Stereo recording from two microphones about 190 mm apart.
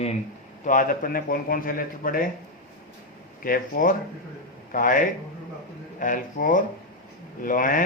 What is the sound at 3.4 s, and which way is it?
A man's voice, 45° left (ahead or behind).